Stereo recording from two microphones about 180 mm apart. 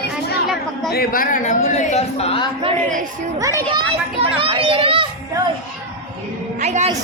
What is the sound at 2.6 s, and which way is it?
Speech, 45° right (ahead or behind).